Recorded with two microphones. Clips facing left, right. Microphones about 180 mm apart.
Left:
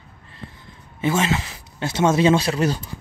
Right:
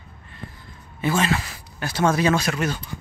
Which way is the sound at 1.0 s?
20° left (ahead or behind).